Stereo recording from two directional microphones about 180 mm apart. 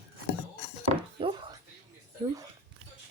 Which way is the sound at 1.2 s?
25° right (ahead or behind).